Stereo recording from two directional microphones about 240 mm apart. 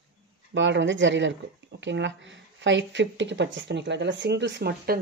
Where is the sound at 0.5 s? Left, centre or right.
Right.